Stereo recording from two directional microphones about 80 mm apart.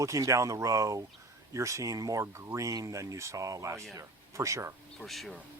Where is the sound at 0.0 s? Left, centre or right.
Right.